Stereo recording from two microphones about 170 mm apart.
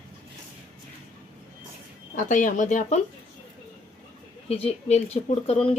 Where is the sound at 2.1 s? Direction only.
50° left (ahead or behind).